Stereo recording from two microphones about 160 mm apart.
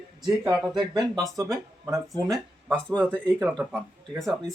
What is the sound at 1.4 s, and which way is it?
Speech, 20° right (ahead or behind).